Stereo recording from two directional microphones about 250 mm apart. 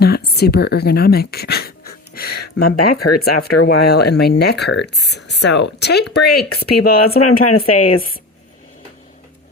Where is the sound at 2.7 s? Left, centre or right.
Left.